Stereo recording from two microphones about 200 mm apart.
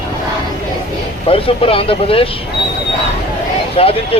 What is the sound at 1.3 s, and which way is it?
Speech, 25° left (ahead or behind).